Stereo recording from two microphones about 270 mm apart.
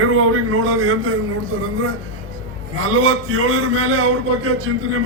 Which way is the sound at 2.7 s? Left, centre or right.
Right.